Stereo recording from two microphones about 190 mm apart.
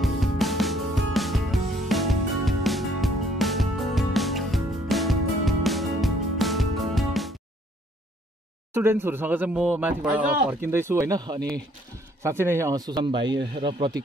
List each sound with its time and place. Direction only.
0.0 s music: centre (ahead or behind)
8.7 s speech: 10° right (ahead or behind)